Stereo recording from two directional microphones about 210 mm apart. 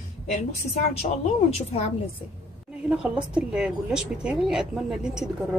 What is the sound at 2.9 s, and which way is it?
A woman's voice, 5° right (ahead or behind).